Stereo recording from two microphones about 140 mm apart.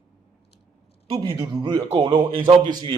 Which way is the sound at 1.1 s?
40° right (ahead or behind).